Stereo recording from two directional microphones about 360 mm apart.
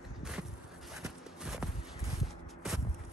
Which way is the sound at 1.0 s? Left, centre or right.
Centre.